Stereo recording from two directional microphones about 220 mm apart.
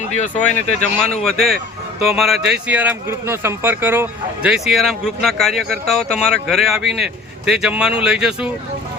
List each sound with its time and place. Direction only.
0.2 s speech: 30° left (ahead or behind)
1.2 s speech: centre (ahead or behind)